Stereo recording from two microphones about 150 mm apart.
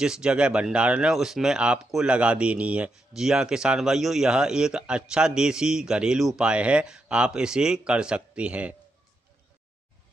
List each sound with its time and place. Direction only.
0.0 s speech: 5° right (ahead or behind)